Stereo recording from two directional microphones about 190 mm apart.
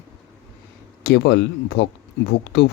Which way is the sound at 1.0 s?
60° left (ahead or behind).